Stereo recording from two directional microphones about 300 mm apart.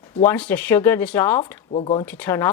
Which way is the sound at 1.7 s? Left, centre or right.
Centre.